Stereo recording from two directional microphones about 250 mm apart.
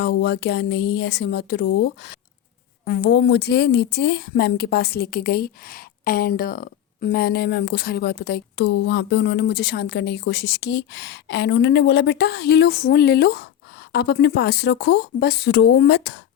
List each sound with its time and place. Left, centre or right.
0.0 s a woman's voice: left